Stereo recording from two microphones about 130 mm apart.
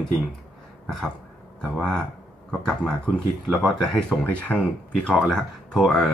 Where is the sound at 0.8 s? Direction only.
5° left (ahead or behind).